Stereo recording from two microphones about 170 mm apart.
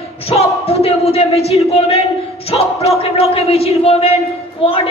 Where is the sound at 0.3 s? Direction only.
35° left (ahead or behind).